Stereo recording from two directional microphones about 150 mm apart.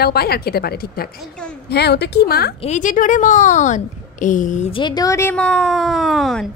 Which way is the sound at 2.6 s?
55° left (ahead or behind).